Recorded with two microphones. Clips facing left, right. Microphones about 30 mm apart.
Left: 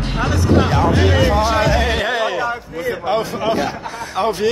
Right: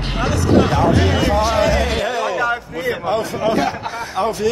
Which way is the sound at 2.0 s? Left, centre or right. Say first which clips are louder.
Left 1 dB; left.